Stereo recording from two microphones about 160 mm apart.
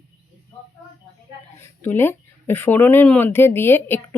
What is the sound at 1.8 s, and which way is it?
Speech, 15° left (ahead or behind).